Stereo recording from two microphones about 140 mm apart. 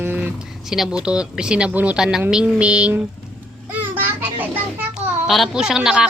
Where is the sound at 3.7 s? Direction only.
10° right (ahead or behind).